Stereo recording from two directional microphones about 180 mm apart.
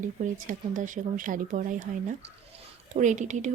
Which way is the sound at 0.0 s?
45° right (ahead or behind).